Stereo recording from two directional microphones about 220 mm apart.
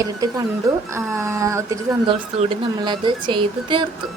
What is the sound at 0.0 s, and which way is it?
A woman's voice, 15° right (ahead or behind).